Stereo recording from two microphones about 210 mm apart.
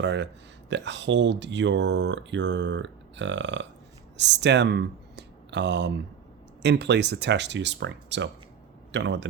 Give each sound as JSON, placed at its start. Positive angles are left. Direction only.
{"t": 0.0, "sound": "speech", "side_deg": -55}